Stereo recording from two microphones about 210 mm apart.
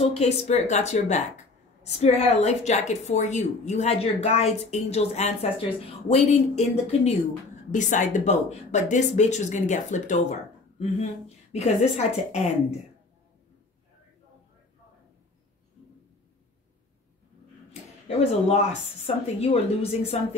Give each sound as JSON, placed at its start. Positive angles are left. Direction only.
{"t": 0.1, "sound": "speech", "side_deg": 30}
{"t": 18.5, "sound": "a woman's voice", "side_deg": 30}